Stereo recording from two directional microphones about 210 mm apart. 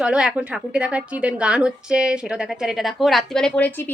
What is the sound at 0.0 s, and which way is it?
A woman's voice, 5° right (ahead or behind).